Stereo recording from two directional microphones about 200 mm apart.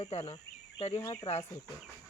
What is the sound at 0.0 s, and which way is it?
Speech, 30° left (ahead or behind).